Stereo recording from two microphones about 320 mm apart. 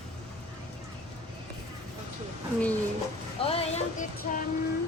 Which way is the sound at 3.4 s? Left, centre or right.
Centre.